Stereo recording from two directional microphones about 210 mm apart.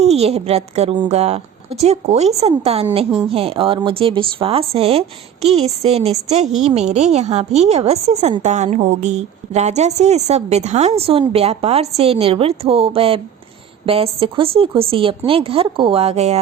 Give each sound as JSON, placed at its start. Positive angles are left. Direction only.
{"t": 0.0, "sound": "a woman's voice", "side_deg": -30}